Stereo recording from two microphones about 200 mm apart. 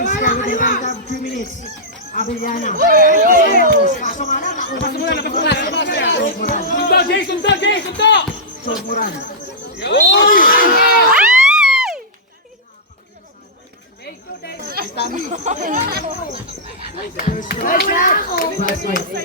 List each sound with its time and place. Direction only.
0.0 s a sound: 40° left (ahead or behind)
2.1 s a man's voice: 40° left (ahead or behind)
2.7 s speech: 45° right (ahead or behind)
3.4 s speech: 45° left (ahead or behind); by 6.3 s 60° left (ahead or behind)
6.5 s speech: 45° left (ahead or behind)
8.9 s speech: 45° left (ahead or behind)
9.7 s speech: 60° left (ahead or behind)
11.1 s a sound: 5° right (ahead or behind)
15.1 s speech: 35° right (ahead or behind)
17.2 s speech: 40° left (ahead or behind)